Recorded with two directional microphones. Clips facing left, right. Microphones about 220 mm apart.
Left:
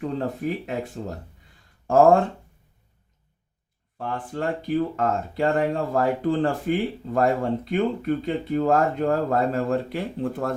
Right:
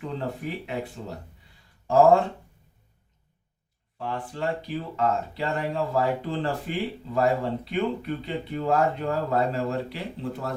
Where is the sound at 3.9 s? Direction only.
50° left (ahead or behind).